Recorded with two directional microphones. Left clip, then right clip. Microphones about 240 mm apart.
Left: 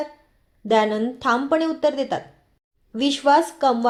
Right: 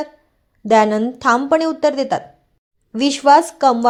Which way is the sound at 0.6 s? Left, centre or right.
Right.